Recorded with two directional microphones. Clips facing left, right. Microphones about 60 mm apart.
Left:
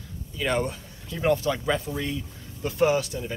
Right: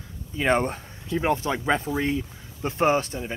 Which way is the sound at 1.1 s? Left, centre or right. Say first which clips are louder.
Even; right.